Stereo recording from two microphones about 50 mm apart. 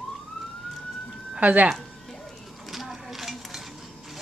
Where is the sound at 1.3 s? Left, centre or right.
Right.